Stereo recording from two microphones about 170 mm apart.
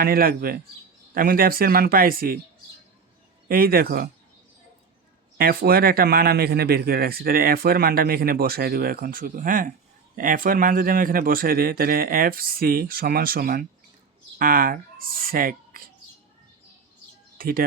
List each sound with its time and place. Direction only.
0.0 s a man's voice: 60° right (ahead or behind)
3.5 s a man's voice: 60° right (ahead or behind)
5.4 s a man's voice: 65° right (ahead or behind)
17.3 s chirp: 55° right (ahead or behind)